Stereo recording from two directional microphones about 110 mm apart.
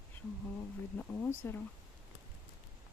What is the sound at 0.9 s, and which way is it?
Speech, 15° left (ahead or behind).